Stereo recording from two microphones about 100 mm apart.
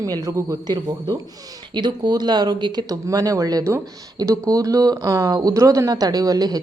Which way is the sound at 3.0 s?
35° right (ahead or behind).